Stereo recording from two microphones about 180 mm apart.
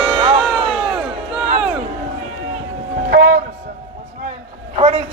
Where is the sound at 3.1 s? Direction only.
90° right.